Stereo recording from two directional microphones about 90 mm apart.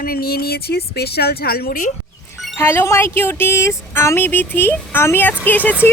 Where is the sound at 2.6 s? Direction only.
25° left (ahead or behind).